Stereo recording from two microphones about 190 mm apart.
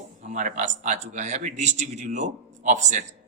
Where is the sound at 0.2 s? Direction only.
40° right (ahead or behind).